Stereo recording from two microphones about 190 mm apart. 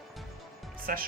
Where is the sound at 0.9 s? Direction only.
50° right (ahead or behind).